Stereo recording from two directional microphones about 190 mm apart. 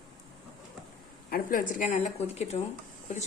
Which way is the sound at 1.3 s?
50° left (ahead or behind).